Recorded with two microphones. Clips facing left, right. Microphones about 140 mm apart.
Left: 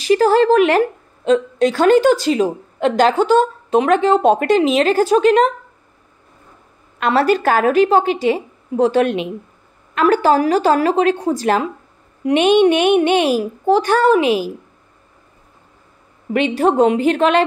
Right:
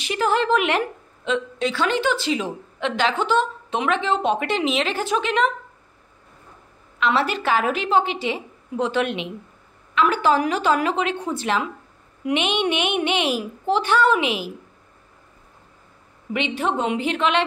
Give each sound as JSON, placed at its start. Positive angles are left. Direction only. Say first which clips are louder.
{"t": 0.0, "sound": "a woman's voice", "louder": "left 9 dB", "side_deg": 35}
{"t": 7.0, "sound": "a woman's voice", "louder": "left 7 dB", "side_deg": 45}
{"t": 16.3, "sound": "a woman's voice", "louder": "left 9 dB", "side_deg": 45}